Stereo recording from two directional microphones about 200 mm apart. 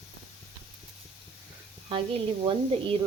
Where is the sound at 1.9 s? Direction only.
30° right (ahead or behind).